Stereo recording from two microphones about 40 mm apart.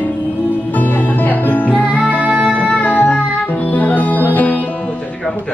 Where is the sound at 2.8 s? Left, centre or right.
Left.